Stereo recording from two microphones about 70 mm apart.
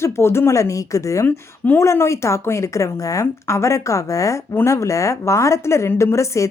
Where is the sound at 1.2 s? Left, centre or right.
Left.